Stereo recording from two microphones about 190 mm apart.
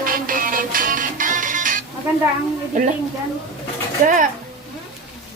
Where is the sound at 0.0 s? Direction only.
45° right (ahead or behind).